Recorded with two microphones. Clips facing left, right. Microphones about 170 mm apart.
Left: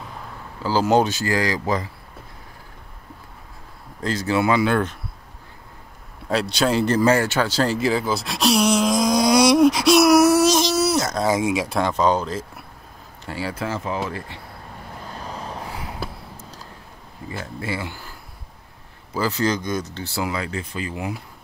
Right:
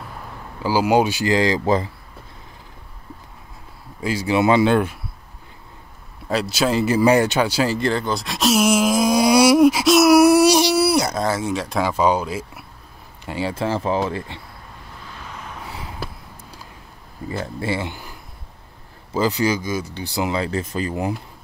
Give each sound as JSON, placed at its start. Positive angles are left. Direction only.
{"t": 0.6, "sound": "speech", "side_deg": -10}
{"t": 4.0, "sound": "speech", "side_deg": -10}
{"t": 6.2, "sound": "speech", "side_deg": 0}
{"t": 11.2, "sound": "speech", "side_deg": 10}
{"t": 11.8, "sound": "speech", "side_deg": -10}
{"t": 13.2, "sound": "speech", "side_deg": -20}
{"t": 15.1, "sound": "vehicle", "side_deg": 35}
{"t": 16.0, "sound": "a sound", "side_deg": -10}
{"t": 17.4, "sound": "speech", "side_deg": -30}
{"t": 19.1, "sound": "speech", "side_deg": -15}
{"t": 20.3, "sound": "speech", "side_deg": -35}